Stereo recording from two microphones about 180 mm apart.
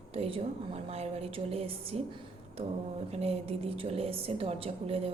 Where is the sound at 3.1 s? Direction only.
35° right (ahead or behind).